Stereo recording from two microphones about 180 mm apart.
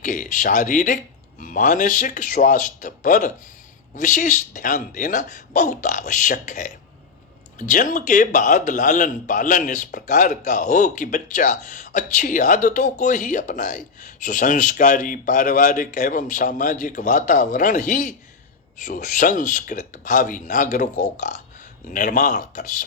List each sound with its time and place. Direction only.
0.0 s a man's voice: 45° left (ahead or behind)
7.7 s a man's voice: 45° left (ahead or behind)